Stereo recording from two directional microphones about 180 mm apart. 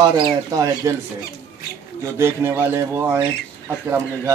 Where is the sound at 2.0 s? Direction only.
15° right (ahead or behind).